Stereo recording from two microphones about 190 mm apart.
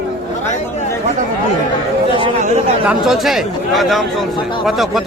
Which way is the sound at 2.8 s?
Centre (ahead or behind).